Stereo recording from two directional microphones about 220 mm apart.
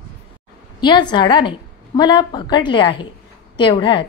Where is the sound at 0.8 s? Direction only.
20° left (ahead or behind).